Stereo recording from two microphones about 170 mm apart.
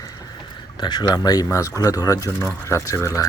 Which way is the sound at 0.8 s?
25° left (ahead or behind).